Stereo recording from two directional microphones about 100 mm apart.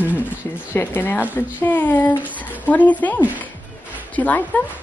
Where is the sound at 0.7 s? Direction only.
20° left (ahead or behind).